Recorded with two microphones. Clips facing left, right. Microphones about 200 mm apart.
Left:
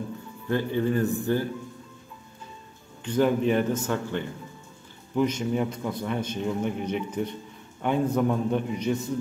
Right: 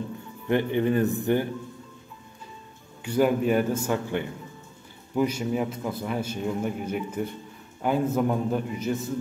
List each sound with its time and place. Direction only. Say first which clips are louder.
0.5 s speech: right 2 dB; 20° right (ahead or behind)
3.0 s a man's voice: even; 10° right (ahead or behind)